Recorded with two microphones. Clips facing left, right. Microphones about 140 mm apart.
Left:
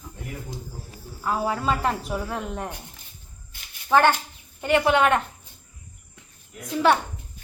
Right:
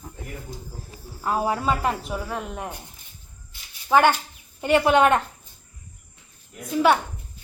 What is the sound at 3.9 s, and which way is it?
Speech, 5° right (ahead or behind).